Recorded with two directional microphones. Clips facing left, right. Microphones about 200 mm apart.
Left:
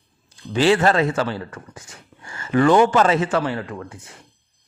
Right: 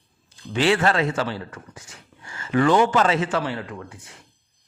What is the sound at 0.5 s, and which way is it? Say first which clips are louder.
A man's voice: left 3 dB; 35° left (ahead or behind).